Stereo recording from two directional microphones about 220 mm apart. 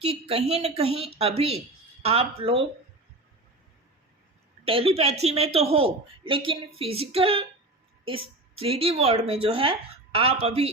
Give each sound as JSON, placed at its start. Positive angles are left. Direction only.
{"t": 0.0, "sound": "a woman's voice", "side_deg": -25}
{"t": 4.6, "sound": "a woman's voice", "side_deg": -25}